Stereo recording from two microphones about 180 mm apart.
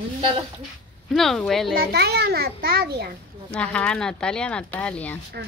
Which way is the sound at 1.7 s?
65° right (ahead or behind).